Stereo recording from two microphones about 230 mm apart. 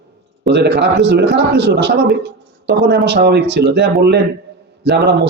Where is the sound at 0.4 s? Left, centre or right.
Right.